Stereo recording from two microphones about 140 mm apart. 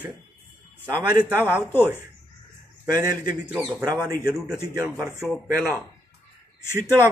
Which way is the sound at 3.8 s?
30° right (ahead or behind).